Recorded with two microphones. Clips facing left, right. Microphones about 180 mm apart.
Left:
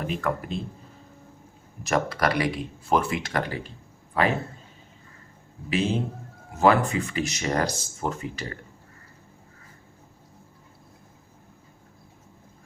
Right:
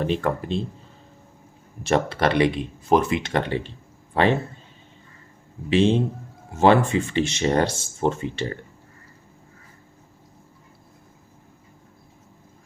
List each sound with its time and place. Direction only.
0.0 s speech: 30° right (ahead or behind)
1.8 s a man's voice: 25° right (ahead or behind)
5.6 s speech: 25° right (ahead or behind)